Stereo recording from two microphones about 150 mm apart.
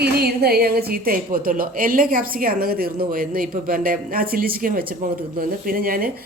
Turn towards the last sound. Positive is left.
turn(degrees=-75)  # may be behind; listen again after turning